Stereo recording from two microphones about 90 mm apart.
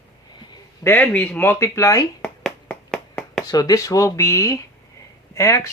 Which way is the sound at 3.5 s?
45° left (ahead or behind).